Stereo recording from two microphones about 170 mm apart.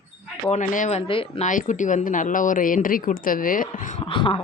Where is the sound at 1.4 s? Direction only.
50° left (ahead or behind).